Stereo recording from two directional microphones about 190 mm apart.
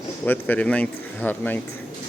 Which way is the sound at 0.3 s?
10° left (ahead or behind).